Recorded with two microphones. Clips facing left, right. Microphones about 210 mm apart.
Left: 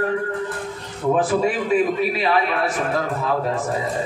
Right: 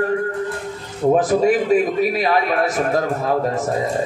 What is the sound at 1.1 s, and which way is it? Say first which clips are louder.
A man's voice: right 4 dB; 40° right (ahead or behind).